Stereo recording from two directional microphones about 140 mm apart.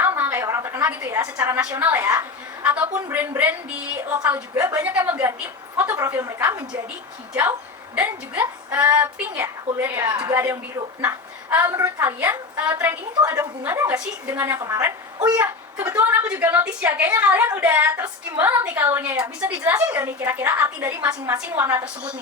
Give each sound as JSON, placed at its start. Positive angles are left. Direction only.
{"t": 0.0, "sound": "a woman's voice", "side_deg": -15}
{"t": 7.9, "sound": "a woman's voice", "side_deg": -10}
{"t": 10.0, "sound": "a woman's voice", "side_deg": -25}
{"t": 10.3, "sound": "a woman's voice", "side_deg": -15}
{"t": 15.2, "sound": "a woman's voice", "side_deg": -10}
{"t": 21.0, "sound": "a woman's voice", "side_deg": -10}